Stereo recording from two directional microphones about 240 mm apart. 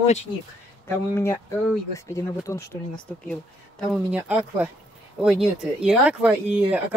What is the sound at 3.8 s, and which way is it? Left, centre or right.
Speech, centre.